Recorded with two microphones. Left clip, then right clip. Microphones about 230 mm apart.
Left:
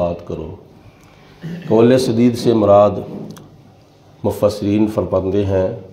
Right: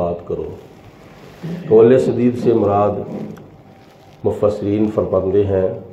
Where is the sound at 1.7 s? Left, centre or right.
Left.